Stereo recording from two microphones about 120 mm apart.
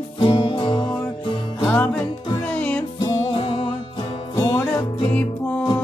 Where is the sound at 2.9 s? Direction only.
45° left (ahead or behind).